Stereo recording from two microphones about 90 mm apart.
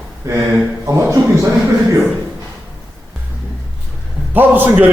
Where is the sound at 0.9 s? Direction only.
35° right (ahead or behind).